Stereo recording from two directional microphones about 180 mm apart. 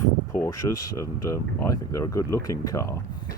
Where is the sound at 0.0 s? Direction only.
15° left (ahead or behind).